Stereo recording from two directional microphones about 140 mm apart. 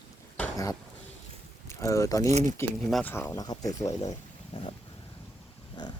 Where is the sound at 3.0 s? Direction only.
15° left (ahead or behind).